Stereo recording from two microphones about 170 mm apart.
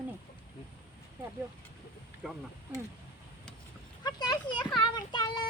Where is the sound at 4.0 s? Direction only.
25° left (ahead or behind).